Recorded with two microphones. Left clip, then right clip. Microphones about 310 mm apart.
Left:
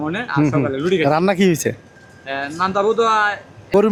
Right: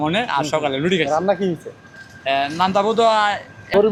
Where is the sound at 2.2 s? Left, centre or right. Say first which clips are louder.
Right 3 dB; centre.